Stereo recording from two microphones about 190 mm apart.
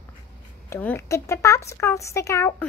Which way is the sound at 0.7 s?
10° left (ahead or behind).